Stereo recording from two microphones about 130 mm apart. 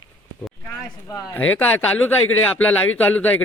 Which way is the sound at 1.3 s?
15° left (ahead or behind).